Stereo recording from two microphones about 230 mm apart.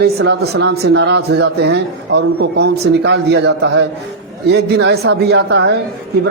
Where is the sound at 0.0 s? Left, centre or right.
Right.